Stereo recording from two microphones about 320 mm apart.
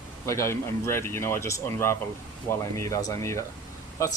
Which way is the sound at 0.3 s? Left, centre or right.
Centre.